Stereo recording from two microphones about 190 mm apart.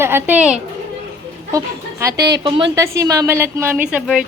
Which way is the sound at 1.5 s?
15° right (ahead or behind).